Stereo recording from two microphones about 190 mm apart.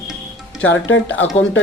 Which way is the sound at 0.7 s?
75° left (ahead or behind).